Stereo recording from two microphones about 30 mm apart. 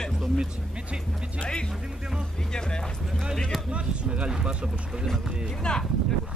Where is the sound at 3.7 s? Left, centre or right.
Right.